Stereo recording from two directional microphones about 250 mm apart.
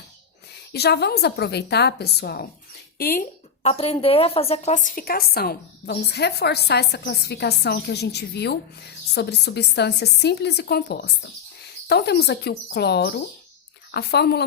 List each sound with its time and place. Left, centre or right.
0.7 s a woman's voice: left